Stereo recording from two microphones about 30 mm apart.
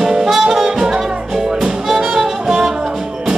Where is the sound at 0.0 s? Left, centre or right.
Centre.